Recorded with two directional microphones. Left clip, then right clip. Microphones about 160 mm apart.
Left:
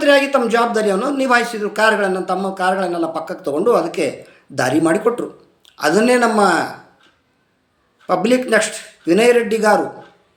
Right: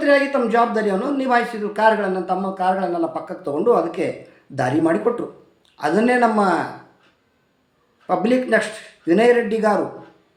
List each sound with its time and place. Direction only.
0.0 s a man's voice: 5° right (ahead or behind)
8.0 s a man's voice: 5° right (ahead or behind)